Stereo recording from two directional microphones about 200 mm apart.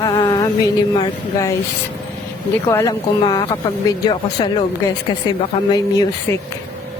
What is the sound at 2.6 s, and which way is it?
Speech, 15° left (ahead or behind).